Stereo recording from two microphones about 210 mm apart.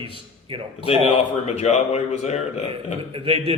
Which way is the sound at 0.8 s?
30° left (ahead or behind).